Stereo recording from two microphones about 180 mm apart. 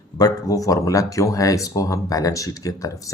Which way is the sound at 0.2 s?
20° left (ahead or behind).